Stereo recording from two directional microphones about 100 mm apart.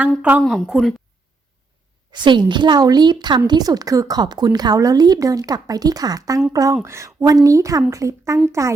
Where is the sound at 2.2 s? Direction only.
50° right (ahead or behind).